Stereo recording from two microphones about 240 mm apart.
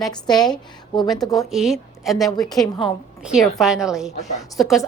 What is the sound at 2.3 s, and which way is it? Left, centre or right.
Speech, centre.